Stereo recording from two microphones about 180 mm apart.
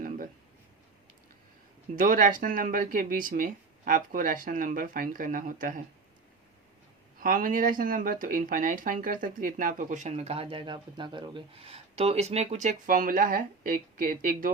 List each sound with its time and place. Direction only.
2.0 s speech: 50° right (ahead or behind)
7.2 s speech: 50° right (ahead or behind)